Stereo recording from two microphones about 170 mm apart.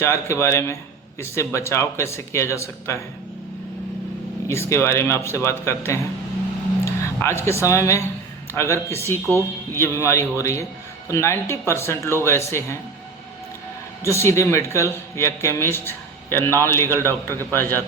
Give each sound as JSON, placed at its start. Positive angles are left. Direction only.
{"t": 0.0, "sound": "a man's voice", "side_deg": 15}
{"t": 4.4, "sound": "a man's voice", "side_deg": 15}
{"t": 14.0, "sound": "a man's voice", "side_deg": 15}